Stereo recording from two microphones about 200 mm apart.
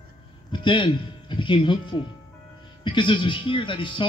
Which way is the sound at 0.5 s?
25° left (ahead or behind).